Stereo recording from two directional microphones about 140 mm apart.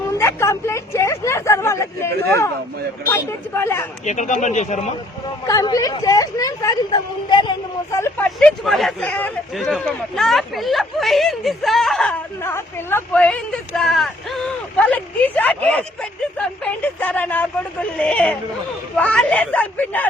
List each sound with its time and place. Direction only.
0.2 s speech: 20° left (ahead or behind)
4.0 s speech: 60° left (ahead or behind)
5.5 s speech: 25° left (ahead or behind)
7.9 s speech: 20° left (ahead or behind)
8.4 s speech: 5° left (ahead or behind)
12.4 s speech: 15° left (ahead or behind)